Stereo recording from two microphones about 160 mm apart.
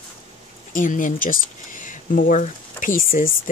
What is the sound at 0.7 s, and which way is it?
Speech, 55° left (ahead or behind).